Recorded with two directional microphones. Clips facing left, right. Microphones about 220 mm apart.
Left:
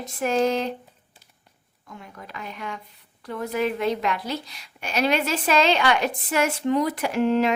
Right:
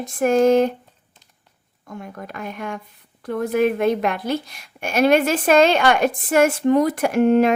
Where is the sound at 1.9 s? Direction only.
50° right (ahead or behind).